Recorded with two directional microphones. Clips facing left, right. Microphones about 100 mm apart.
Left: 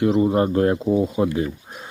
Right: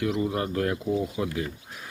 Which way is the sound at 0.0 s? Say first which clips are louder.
Left 9 dB; 30° left (ahead or behind).